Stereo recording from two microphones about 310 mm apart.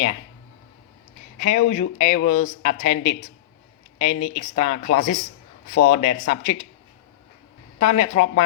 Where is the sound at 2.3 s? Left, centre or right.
Left.